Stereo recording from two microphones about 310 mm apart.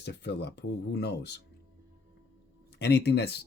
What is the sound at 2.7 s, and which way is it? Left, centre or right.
Speech, left.